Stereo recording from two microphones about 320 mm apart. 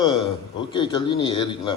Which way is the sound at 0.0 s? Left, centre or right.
Centre.